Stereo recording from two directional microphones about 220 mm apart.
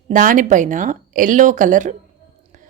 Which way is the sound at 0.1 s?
35° right (ahead or behind).